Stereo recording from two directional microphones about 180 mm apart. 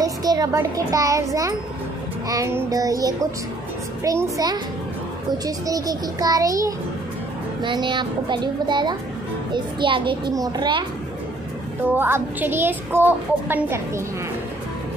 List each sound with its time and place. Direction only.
0.0 s a child's voice: 20° right (ahead or behind)
2.2 s a woman's voice: 15° right (ahead or behind)
11.9 s a woman's voice: 10° right (ahead or behind)